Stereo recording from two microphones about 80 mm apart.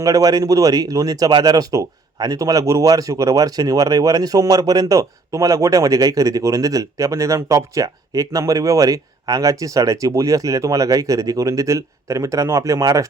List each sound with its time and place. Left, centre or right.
0.0 s a man's voice: right